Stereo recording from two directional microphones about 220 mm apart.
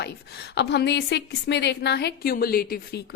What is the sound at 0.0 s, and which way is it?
A woman's voice, 50° left (ahead or behind).